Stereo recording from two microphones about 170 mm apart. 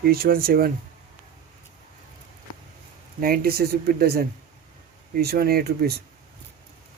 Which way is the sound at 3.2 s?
60° right (ahead or behind).